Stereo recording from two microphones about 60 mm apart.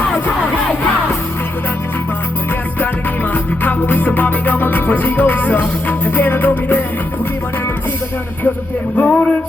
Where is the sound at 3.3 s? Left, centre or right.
Left.